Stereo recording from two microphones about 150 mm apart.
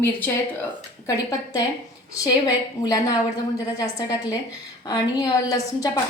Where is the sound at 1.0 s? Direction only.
25° left (ahead or behind).